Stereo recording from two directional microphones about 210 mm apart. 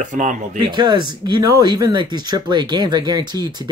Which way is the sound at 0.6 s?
20° right (ahead or behind).